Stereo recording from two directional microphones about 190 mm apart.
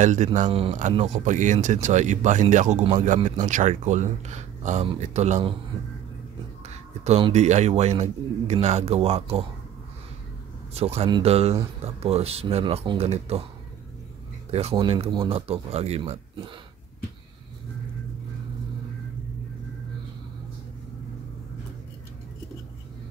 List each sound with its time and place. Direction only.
0.0 s a man's voice: 40° right (ahead or behind)
6.7 s a man's voice: 35° right (ahead or behind)
10.7 s a man's voice: 35° right (ahead or behind)
14.5 s a man's voice: 30° right (ahead or behind)